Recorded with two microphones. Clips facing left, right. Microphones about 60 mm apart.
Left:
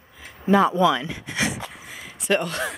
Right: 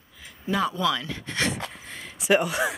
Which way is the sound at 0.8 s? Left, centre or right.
Centre.